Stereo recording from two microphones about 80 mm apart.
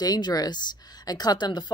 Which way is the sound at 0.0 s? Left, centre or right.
Left.